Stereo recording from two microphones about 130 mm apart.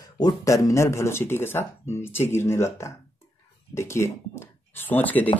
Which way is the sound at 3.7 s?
20° left (ahead or behind).